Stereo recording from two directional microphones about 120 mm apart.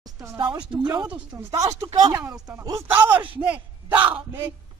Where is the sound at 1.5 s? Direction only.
25° right (ahead or behind).